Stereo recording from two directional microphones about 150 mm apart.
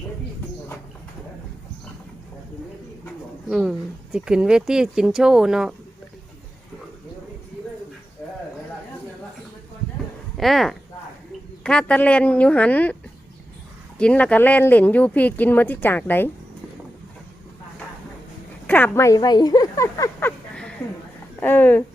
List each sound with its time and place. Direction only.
3.5 s speech: 5° right (ahead or behind)
10.3 s speech: centre (ahead or behind)
14.0 s speech: 10° left (ahead or behind)
18.7 s speech: 15° left (ahead or behind)